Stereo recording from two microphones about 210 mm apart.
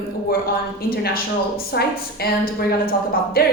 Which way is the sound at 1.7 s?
50° left (ahead or behind).